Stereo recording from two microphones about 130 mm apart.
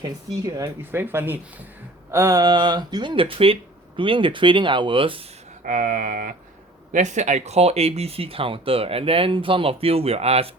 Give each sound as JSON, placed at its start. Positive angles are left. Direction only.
{"t": 0.4, "sound": "speech", "side_deg": -30}
{"t": 0.9, "sound": "speech", "side_deg": -15}
{"t": 5.6, "sound": "speech", "side_deg": -90}
{"t": 6.9, "sound": "speech", "side_deg": -65}